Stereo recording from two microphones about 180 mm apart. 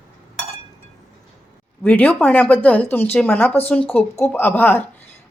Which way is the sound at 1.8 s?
10° left (ahead or behind).